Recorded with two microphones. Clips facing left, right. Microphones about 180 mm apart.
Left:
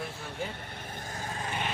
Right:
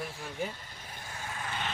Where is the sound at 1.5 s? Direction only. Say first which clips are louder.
Left 3 dB; 20° left (ahead or behind).